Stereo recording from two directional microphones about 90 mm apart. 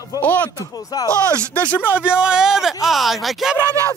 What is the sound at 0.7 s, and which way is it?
Speech, 45° left (ahead or behind).